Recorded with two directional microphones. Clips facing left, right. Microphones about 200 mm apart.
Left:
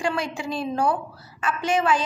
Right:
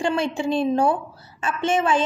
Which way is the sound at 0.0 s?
25° right (ahead or behind).